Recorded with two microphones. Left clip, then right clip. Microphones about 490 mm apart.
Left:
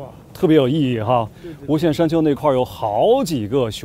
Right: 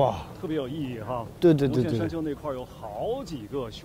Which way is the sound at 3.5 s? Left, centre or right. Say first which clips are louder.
Left 13 dB; left.